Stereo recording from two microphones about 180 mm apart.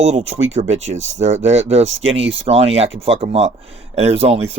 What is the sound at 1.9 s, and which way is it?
Speech, 90° right.